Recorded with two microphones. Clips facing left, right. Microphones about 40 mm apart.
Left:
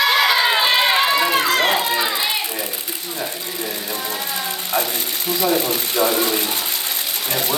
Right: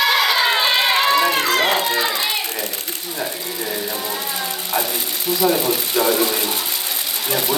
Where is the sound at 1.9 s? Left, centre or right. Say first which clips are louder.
Even; centre.